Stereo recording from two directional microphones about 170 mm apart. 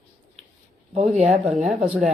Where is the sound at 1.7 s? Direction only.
5° right (ahead or behind).